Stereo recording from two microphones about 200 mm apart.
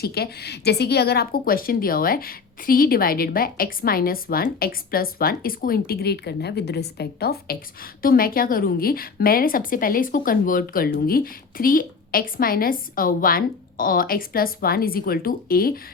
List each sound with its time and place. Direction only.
0.0 s a woman's voice: 50° left (ahead or behind)